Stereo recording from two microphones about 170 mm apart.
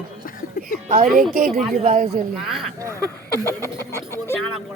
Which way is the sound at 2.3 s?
Centre (ahead or behind).